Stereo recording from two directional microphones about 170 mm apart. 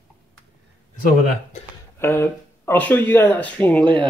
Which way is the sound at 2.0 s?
15° left (ahead or behind).